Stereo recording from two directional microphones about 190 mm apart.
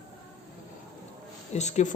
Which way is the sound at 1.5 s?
35° left (ahead or behind).